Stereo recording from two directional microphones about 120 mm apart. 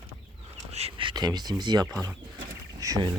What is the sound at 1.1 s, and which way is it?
Speech, 35° right (ahead or behind).